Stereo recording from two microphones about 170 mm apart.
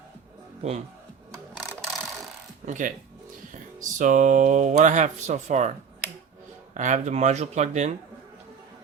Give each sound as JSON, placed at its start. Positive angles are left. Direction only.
{"t": 0.6, "sound": "speech", "side_deg": -45}
{"t": 2.6, "sound": "speech", "side_deg": -50}
{"t": 6.7, "sound": "speech", "side_deg": -45}